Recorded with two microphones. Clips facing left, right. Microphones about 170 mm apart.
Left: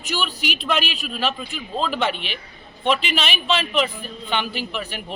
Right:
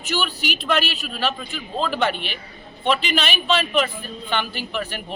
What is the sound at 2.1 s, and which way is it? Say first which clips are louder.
Speech: right 1 dB; 40° right (ahead or behind).